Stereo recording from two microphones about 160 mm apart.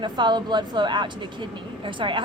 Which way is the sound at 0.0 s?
30° right (ahead or behind).